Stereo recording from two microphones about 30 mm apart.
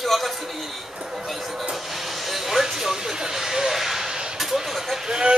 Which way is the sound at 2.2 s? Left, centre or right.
Centre.